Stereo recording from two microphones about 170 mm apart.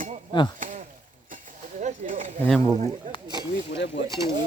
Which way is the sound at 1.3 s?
50° right (ahead or behind).